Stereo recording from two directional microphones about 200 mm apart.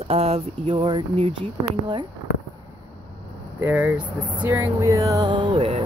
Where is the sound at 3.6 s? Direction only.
10° right (ahead or behind).